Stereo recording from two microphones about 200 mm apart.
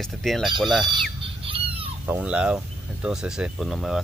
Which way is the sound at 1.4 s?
25° right (ahead or behind).